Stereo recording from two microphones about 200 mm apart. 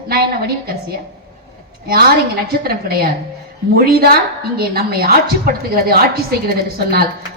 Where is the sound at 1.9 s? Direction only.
50° right (ahead or behind).